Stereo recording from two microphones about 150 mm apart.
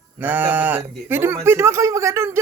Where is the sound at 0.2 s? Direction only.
15° right (ahead or behind).